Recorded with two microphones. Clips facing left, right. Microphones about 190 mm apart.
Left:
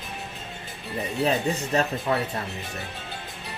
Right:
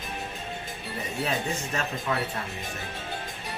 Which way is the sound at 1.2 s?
35° left (ahead or behind).